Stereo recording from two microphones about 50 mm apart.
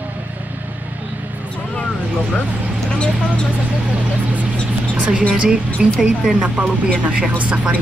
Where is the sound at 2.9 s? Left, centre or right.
Centre.